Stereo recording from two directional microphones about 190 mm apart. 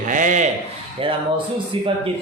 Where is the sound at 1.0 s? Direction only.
30° right (ahead or behind).